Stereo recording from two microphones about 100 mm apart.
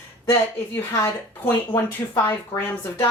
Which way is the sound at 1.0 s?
25° left (ahead or behind).